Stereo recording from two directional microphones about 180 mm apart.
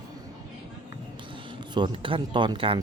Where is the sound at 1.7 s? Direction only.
25° right (ahead or behind).